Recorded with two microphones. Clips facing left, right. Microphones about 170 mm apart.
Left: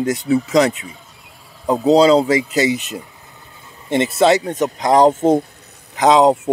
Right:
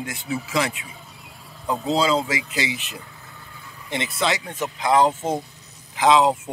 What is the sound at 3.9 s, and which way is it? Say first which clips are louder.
Speech: left 11 dB; 45° left (ahead or behind).